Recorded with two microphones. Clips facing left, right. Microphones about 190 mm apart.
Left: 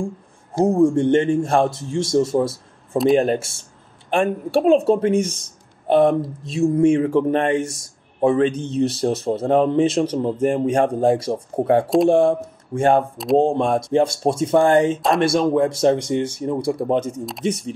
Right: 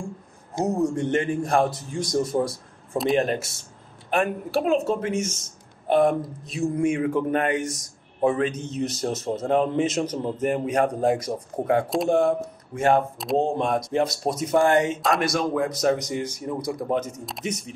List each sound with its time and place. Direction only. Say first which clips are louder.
0.7 s speech: left 8 dB; 25° left (ahead or behind)